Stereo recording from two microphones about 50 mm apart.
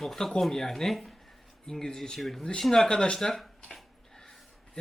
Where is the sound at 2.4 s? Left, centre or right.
Centre.